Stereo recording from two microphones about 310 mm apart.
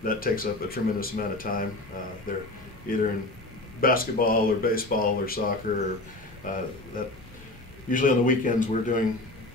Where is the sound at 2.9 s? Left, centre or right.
Left.